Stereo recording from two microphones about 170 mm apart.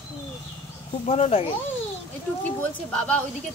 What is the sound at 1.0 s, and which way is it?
Speech, 40° left (ahead or behind).